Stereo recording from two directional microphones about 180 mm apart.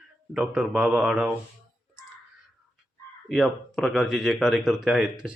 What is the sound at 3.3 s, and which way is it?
Speech, centre (ahead or behind).